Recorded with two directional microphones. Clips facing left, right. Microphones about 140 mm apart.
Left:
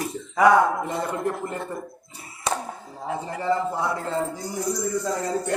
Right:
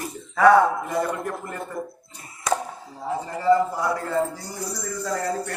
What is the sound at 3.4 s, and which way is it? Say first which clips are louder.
A man's voice: right 5 dB; 25° left (ahead or behind).